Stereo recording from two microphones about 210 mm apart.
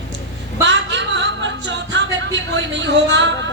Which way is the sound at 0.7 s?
60° right (ahead or behind).